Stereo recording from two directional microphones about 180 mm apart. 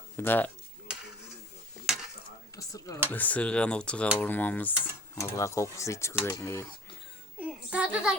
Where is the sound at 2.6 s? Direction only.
20° left (ahead or behind).